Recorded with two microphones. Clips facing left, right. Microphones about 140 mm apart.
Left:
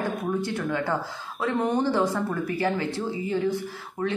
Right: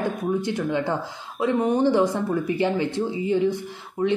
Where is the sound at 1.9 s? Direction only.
20° right (ahead or behind).